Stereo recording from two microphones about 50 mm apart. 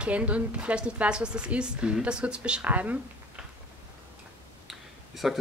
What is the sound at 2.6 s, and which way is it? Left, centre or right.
Speech, right.